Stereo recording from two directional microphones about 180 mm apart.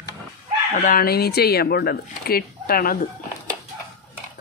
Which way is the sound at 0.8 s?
50° left (ahead or behind).